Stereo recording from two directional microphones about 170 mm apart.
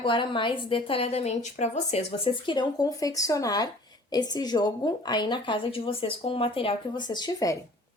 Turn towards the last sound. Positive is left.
turn(degrees=20)  # may be behind; listen again after turning